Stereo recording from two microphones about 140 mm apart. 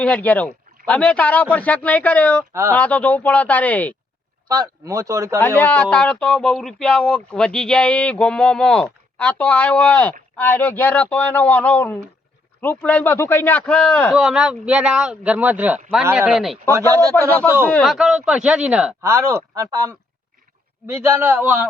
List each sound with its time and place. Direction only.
0.0 s speech: 10° left (ahead or behind)
2.5 s speech: 20° right (ahead or behind)
2.7 s speech: 10° left (ahead or behind)
4.4 s a man's voice: 25° right (ahead or behind)
5.5 s a man's voice: 10° left (ahead or behind); by 16.6 s 5° right (ahead or behind)
16.9 s a man's voice: 25° right (ahead or behind)
17.2 s speech: 15° left (ahead or behind)
17.9 s a man's voice: 5° right (ahead or behind)
19.0 s a man's voice: 20° right (ahead or behind)